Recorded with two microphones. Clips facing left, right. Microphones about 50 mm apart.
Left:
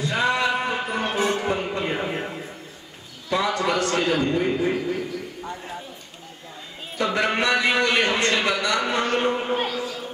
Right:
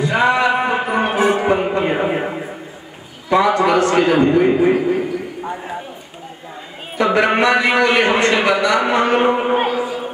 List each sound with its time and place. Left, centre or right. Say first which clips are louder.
0.0 s music: right 7 dB; right
3.3 s a man's voice: right 9 dB; right
7.0 s a man's voice: right 8 dB; right